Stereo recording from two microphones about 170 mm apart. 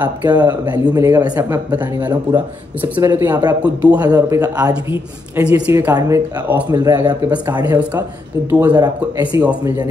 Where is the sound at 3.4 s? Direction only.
25° right (ahead or behind).